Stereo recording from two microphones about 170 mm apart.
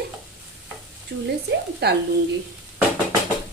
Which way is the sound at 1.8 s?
75° right (ahead or behind).